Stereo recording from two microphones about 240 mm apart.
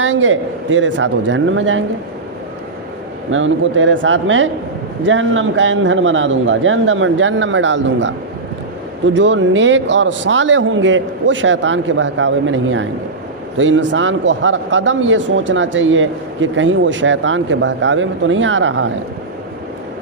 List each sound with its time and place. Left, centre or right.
0.0 s speech: right
3.3 s speech: right